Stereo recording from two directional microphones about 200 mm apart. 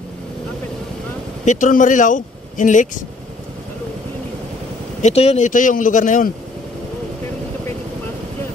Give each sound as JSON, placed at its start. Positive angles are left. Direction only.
{"t": 1.4, "sound": "speech", "side_deg": 40}
{"t": 5.0, "sound": "speech", "side_deg": 30}